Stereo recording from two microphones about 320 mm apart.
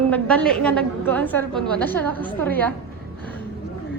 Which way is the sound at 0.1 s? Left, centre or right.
Centre.